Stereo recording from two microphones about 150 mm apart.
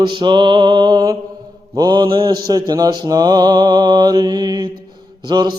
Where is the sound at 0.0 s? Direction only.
30° right (ahead or behind).